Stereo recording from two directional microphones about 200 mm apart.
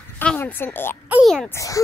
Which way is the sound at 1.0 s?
5° right (ahead or behind).